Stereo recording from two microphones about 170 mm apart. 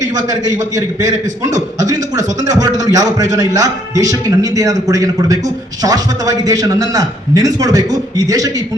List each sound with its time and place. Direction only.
0.3 s a man's voice: 20° right (ahead or behind)